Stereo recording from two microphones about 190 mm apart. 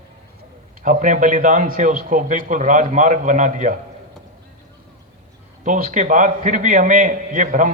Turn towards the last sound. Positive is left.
turn(degrees=-45)  # may be behind; listen again after turning